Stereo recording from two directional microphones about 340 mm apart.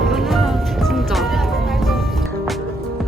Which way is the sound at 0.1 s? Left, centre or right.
Centre.